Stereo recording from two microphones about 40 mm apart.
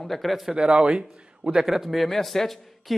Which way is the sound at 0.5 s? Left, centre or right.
Right.